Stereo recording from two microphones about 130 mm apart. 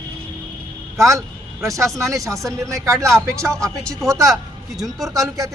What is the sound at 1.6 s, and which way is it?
Speech, 25° right (ahead or behind).